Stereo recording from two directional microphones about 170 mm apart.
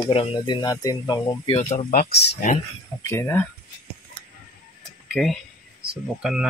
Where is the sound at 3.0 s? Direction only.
15° left (ahead or behind).